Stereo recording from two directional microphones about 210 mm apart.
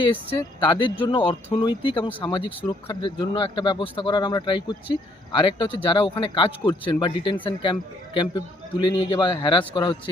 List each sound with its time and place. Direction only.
0.0 s speech: 25° left (ahead or behind)